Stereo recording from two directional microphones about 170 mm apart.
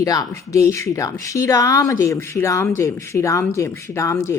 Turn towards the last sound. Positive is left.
turn(degrees=15)  # may be behind; listen again after turning